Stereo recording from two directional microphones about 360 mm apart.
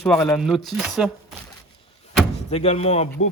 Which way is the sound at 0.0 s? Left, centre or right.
Centre.